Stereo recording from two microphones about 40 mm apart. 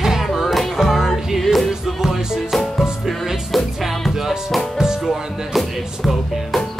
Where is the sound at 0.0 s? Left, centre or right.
Centre.